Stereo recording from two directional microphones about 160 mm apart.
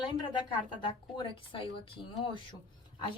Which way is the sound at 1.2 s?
30° left (ahead or behind).